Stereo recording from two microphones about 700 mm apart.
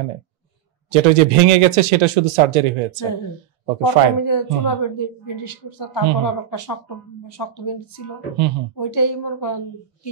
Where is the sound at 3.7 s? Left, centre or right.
Left.